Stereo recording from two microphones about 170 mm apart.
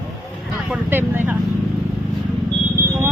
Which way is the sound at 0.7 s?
10° right (ahead or behind).